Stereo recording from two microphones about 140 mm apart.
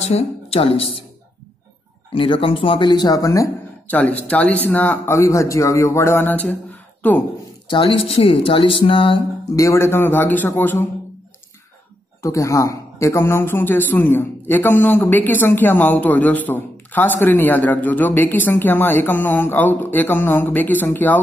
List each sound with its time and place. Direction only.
0.1 s a woman's voice: 45° left (ahead or behind)
2.1 s speech: 35° left (ahead or behind)
3.9 s speech: 10° left (ahead or behind)
7.7 s speech: 40° left (ahead or behind)
9.6 s speech: 20° left (ahead or behind)
12.2 s speech: 20° left (ahead or behind)